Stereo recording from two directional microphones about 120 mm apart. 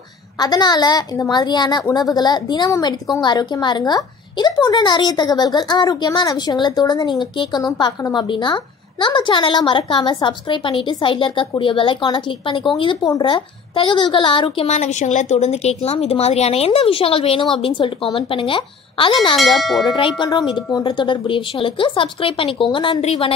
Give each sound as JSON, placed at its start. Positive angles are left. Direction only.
{"t": 0.4, "sound": "a woman's voice", "side_deg": 35}
{"t": 14.7, "sound": "a woman's voice", "side_deg": 85}
{"t": 19.3, "sound": "cowbell", "side_deg": 0}
{"t": 20.2, "sound": "a woman's voice", "side_deg": 40}